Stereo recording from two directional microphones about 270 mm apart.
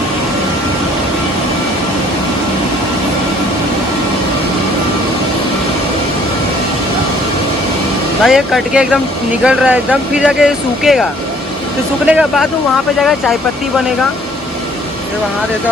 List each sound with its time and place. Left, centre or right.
8.2 s speech: centre
12.0 s speech: centre